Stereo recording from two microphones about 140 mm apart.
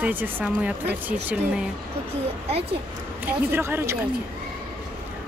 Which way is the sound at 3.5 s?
15° right (ahead or behind).